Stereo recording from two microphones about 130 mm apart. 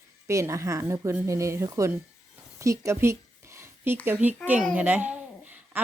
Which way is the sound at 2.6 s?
25° right (ahead or behind).